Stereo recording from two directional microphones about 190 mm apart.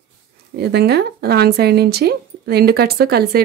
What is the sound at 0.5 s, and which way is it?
Speech, 55° right (ahead or behind).